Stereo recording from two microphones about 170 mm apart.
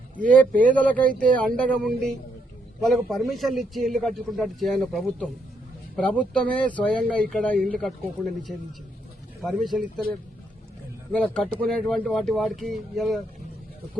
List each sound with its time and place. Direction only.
0.7 s a man's voice: 10° left (ahead or behind)
9.4 s a man's voice: centre (ahead or behind)